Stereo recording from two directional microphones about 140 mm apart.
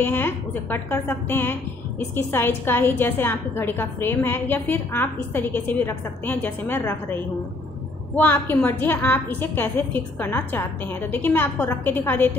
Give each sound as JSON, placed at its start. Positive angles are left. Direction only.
{"t": 0.0, "sound": "a woman's voice", "side_deg": 15}
{"t": 8.2, "sound": "a woman's voice", "side_deg": 15}